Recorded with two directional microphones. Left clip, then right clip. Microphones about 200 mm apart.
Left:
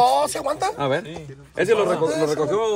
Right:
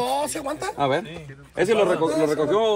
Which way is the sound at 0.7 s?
25° right (ahead or behind).